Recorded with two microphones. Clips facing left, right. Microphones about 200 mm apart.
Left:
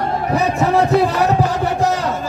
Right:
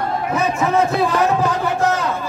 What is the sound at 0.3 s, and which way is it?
Speech, 35° left (ahead or behind).